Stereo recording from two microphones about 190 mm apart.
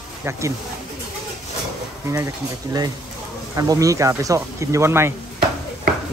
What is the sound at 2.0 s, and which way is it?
Speech, 15° right (ahead or behind).